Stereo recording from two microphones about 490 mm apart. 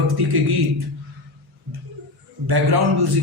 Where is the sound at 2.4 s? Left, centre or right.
Right.